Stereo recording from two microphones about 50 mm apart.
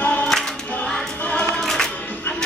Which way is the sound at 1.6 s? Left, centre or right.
Centre.